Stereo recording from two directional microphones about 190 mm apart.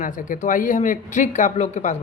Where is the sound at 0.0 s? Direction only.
45° left (ahead or behind).